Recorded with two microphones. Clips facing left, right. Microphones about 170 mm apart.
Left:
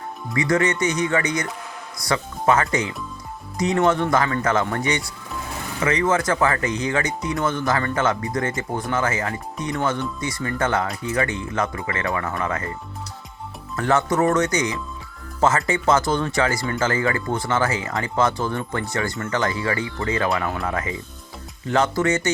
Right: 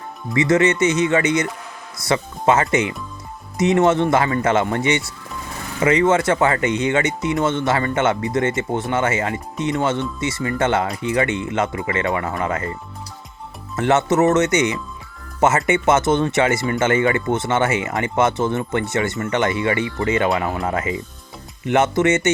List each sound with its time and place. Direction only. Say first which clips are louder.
0.3 s speech: right 4 dB; 25° right (ahead or behind)
13.7 s speech: right 3 dB; 25° right (ahead or behind)